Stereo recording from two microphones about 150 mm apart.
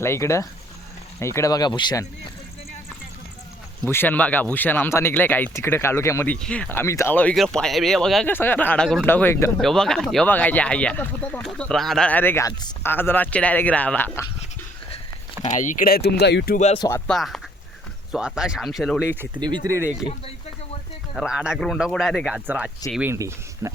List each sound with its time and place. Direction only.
0.0 s speech: 20° left (ahead or behind)
3.8 s speech: 15° left (ahead or behind)
9.6 s speech: 5° left (ahead or behind)
15.4 s speech: 55° left (ahead or behind); by 16.6 s 90° left
17.1 s speech: centre (ahead or behind)
19.4 s speech: 25° right (ahead or behind)
21.2 s speech: 5° right (ahead or behind)
22.4 s speech: 10° right (ahead or behind)